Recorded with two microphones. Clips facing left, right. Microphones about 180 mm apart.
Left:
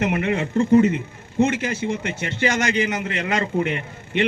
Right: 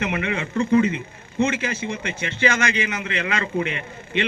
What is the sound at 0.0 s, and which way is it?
A man's voice, 45° left (ahead or behind).